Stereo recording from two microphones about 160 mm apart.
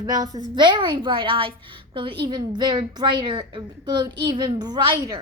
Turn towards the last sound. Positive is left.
turn(degrees=-25)  # may be behind; listen again after turning